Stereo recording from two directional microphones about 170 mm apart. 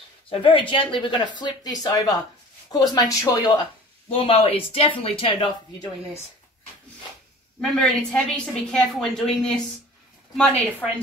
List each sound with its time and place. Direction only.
0.3 s speech: 30° left (ahead or behind)
7.8 s a woman's voice: 5° left (ahead or behind)